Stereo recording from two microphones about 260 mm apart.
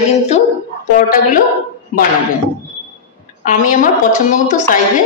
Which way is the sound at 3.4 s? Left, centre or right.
Left.